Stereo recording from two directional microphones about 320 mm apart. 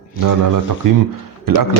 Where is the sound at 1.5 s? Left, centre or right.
Right.